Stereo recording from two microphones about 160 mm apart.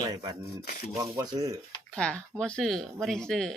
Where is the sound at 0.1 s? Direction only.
25° right (ahead or behind).